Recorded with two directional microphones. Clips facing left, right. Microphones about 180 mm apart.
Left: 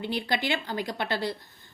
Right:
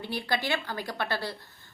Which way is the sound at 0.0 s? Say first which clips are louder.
Left 2 dB; 20° left (ahead or behind).